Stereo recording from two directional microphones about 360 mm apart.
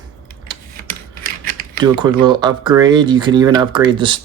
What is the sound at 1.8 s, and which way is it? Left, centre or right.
Speech, centre.